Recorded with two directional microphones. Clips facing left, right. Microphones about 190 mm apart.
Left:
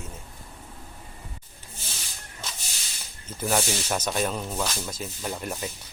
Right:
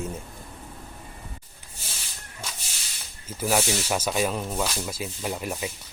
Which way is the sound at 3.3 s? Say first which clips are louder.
Right 2 dB; 10° right (ahead or behind).